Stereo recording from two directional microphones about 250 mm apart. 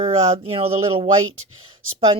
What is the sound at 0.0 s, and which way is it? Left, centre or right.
Speech, right.